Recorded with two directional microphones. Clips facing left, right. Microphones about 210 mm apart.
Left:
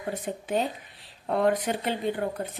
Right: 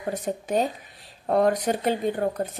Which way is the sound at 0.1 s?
45° right (ahead or behind).